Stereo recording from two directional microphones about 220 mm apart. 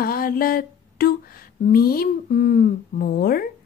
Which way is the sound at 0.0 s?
40° left (ahead or behind).